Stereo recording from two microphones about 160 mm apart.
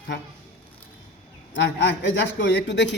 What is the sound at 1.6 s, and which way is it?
A man's voice, 90° left.